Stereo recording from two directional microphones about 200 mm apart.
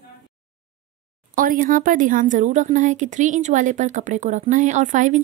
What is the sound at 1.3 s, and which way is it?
Speech, 45° right (ahead or behind).